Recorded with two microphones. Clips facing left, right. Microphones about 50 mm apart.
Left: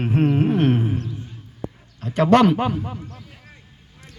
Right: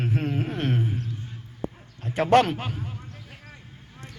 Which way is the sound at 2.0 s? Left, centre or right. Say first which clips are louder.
Left 4 dB; left.